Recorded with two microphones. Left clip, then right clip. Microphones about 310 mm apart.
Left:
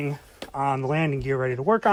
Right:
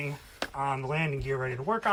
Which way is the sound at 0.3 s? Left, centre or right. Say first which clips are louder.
Left 5 dB; left.